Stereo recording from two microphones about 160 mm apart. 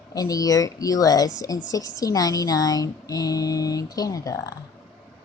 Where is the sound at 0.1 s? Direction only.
20° left (ahead or behind).